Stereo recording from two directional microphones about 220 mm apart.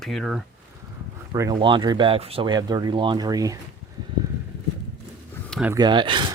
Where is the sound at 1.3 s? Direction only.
15° right (ahead or behind).